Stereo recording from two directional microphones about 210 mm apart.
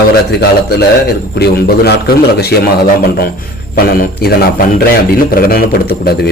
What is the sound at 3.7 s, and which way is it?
Speech, 45° left (ahead or behind).